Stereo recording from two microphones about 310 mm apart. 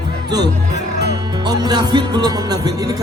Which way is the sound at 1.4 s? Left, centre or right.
Centre.